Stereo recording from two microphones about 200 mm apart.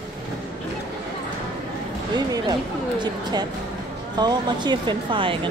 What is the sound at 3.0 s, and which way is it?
Speech, 20° right (ahead or behind).